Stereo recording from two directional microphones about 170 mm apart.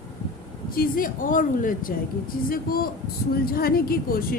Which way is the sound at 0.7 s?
55° left (ahead or behind).